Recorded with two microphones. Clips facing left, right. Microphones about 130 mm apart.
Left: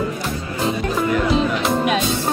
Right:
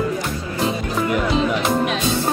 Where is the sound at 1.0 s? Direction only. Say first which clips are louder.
Left 1 dB; centre (ahead or behind).